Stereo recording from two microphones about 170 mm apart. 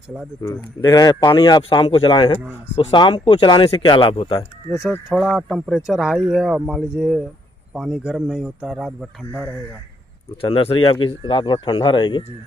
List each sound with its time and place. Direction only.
0.4 s speech: 15° left (ahead or behind)
5.1 s speech: centre (ahead or behind)
10.4 s speech: 35° left (ahead or behind)